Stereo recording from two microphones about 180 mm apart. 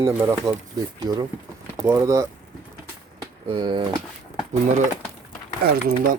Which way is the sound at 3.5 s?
30° right (ahead or behind).